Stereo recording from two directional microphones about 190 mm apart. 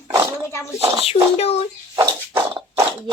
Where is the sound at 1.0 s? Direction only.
35° left (ahead or behind).